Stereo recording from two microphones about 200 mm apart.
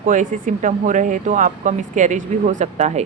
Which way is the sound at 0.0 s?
40° right (ahead or behind).